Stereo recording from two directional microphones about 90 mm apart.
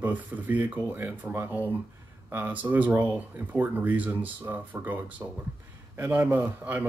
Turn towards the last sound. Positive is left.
turn(degrees=-20)  # may be behind; listen again after turning